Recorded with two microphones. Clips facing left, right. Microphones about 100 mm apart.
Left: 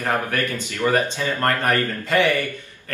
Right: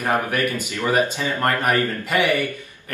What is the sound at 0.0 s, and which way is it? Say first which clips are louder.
Speech: right 2 dB; 15° right (ahead or behind).